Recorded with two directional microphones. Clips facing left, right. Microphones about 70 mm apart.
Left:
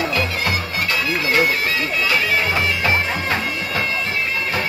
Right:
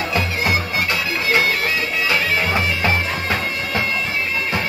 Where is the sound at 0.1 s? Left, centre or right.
Right.